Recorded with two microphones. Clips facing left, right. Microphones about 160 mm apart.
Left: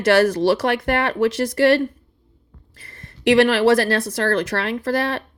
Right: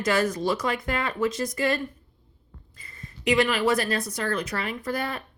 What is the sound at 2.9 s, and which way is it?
A woman's voice, 80° left.